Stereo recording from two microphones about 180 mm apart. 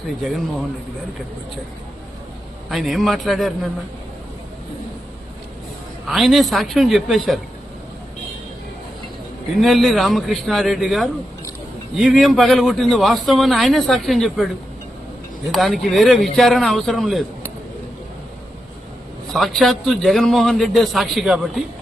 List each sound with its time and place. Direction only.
2.6 s a man's voice: centre (ahead or behind)
6.1 s a man's voice: centre (ahead or behind)
9.6 s a man's voice: centre (ahead or behind)
15.5 s a man's voice: centre (ahead or behind)
19.3 s a man's voice: centre (ahead or behind)